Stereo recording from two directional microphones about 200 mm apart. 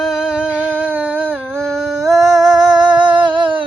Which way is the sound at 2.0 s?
Centre (ahead or behind).